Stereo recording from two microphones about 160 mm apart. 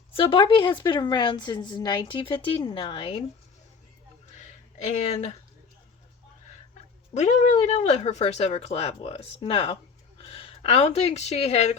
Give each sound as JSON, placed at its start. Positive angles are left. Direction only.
{"t": 0.1, "sound": "a woman's voice", "side_deg": 35}
{"t": 4.4, "sound": "a sound", "side_deg": 45}
{"t": 7.1, "sound": "speech", "side_deg": 45}